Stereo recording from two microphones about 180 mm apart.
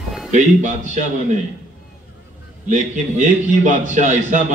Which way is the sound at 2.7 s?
45° right (ahead or behind).